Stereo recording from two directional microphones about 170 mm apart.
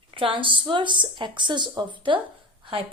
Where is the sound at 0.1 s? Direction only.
30° right (ahead or behind).